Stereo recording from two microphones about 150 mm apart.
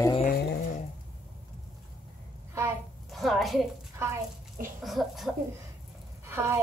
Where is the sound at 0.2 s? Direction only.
70° left (ahead or behind).